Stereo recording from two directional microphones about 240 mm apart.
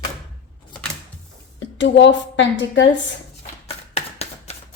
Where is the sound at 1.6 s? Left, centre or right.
Left.